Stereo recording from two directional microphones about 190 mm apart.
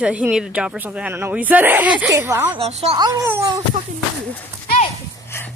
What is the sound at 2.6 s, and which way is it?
Speech, 35° right (ahead or behind).